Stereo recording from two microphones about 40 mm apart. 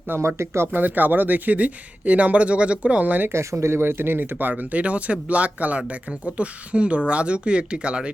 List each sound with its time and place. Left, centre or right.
0.1 s speech: right
0.8 s speech: right
3.2 s speech: right